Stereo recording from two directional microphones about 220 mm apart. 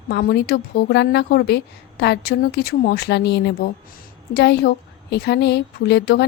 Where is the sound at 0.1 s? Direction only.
45° left (ahead or behind).